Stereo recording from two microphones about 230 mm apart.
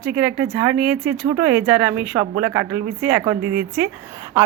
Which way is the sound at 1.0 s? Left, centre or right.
Right.